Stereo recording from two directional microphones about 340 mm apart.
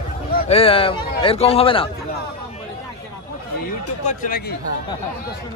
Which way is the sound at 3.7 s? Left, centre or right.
Left.